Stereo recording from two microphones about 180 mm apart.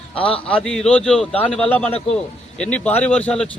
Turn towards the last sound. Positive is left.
turn(degrees=5)  # may be behind; listen again after turning